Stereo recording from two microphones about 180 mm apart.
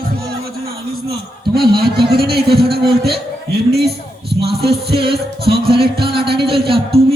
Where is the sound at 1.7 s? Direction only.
60° right (ahead or behind).